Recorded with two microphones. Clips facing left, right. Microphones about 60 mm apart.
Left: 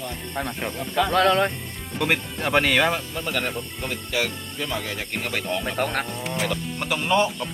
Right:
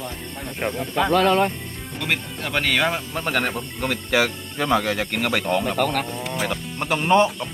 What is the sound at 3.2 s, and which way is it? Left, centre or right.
Speech, right.